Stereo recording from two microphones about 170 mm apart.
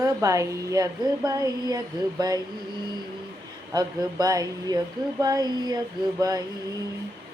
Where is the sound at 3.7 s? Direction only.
20° right (ahead or behind).